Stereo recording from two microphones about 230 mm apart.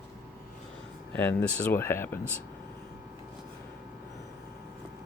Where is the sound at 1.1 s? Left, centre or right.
Centre.